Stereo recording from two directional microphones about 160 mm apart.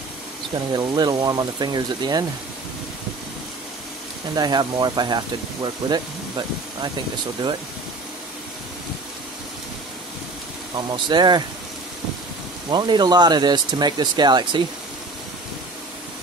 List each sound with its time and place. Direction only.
0.7 s speech: 25° right (ahead or behind)
4.4 s speech: 25° right (ahead or behind)
10.9 s speech: 30° right (ahead or behind)
12.7 s speech: 25° right (ahead or behind)